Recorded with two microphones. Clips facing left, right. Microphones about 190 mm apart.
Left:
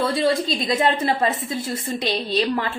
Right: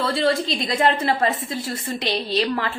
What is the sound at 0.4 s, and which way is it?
Speech, 25° right (ahead or behind).